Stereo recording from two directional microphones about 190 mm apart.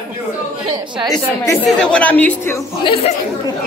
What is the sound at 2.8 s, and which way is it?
Speech, 30° left (ahead or behind).